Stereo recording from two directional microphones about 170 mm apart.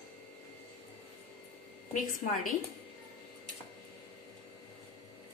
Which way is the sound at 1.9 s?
50° left (ahead or behind).